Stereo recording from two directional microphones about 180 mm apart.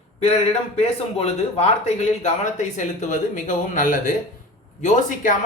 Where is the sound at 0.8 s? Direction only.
35° left (ahead or behind).